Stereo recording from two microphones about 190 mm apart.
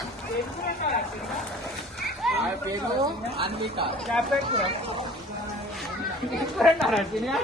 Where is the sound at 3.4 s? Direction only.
25° right (ahead or behind).